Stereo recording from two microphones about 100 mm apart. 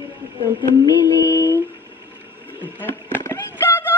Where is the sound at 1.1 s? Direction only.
30° left (ahead or behind).